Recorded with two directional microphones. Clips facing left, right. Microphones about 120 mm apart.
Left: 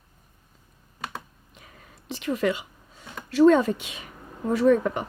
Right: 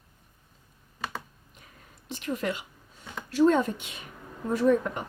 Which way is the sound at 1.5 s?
90° left.